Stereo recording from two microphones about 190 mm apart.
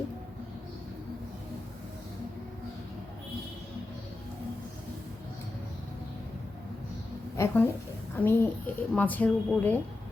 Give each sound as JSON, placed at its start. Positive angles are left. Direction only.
{"t": 7.3, "sound": "a child's voice", "side_deg": 10}